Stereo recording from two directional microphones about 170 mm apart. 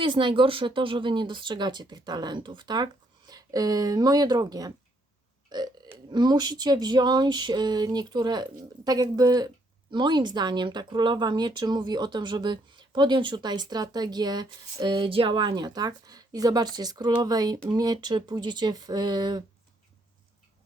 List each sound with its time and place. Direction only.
0.0 s a man's voice: 30° right (ahead or behind)